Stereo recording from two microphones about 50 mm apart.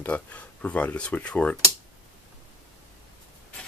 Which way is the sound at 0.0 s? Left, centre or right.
Left.